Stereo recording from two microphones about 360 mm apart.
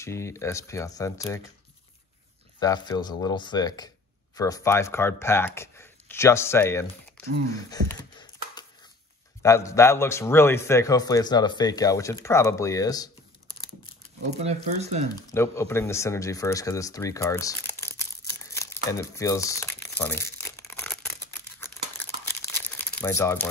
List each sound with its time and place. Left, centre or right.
0.0 s a man's voice: centre
2.6 s a man's voice: centre
14.4 s speech: centre
15.3 s a man's voice: centre
18.5 s crumpling: centre
22.4 s crumpling: centre